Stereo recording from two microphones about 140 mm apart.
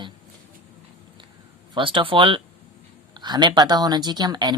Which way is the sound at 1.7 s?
35° right (ahead or behind).